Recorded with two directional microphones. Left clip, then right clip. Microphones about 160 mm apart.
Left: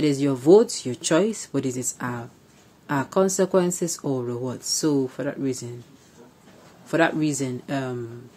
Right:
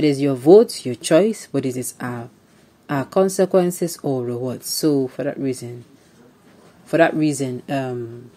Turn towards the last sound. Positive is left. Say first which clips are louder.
# right 4 dB
turn(degrees=-20)  # may be behind; listen again after turning